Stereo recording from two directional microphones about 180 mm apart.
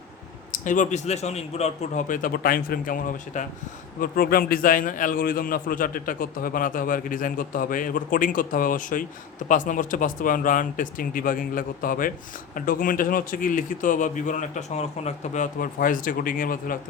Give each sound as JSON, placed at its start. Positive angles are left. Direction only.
{"t": 0.6, "sound": "a man's voice", "side_deg": 45}